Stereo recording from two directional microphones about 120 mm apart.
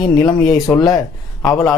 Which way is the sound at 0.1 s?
30° left (ahead or behind).